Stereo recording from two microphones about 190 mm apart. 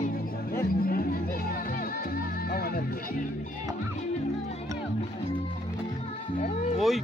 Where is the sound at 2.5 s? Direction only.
50° left (ahead or behind).